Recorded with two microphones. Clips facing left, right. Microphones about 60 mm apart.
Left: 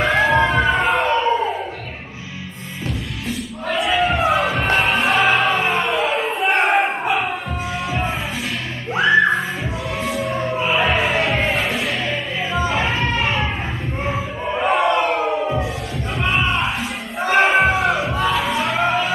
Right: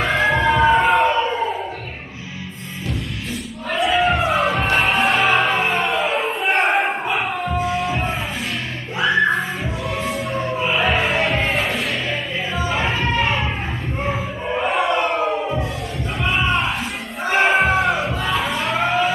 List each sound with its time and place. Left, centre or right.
0.0 s emergency vehicle: centre
0.5 s music: centre
3.7 s music: centre
13.2 s a sound: centre
14.0 s crowd: centre
16.2 s music: centre